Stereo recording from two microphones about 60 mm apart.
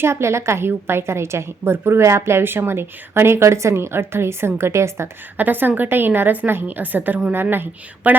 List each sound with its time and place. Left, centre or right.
0.0 s a woman's voice: right
5.4 s a woman's voice: right